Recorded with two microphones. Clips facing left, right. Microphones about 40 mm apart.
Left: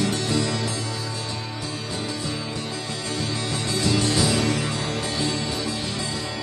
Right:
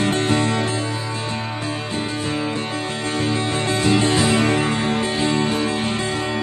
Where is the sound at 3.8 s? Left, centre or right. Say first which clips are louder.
Right 4 dB; right.